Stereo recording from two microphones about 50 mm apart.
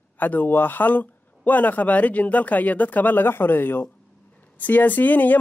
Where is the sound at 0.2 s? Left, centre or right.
Left.